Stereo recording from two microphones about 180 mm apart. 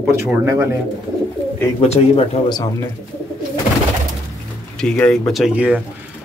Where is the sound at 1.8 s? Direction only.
35° left (ahead or behind).